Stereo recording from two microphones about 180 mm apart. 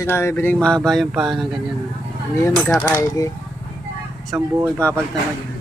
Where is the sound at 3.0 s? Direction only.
20° left (ahead or behind).